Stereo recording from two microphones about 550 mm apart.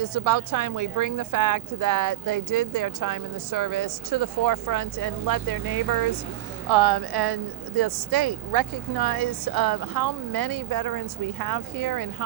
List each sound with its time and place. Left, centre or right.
0.0 s a woman's voice: right